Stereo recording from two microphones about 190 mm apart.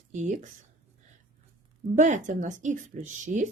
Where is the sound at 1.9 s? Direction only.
40° right (ahead or behind).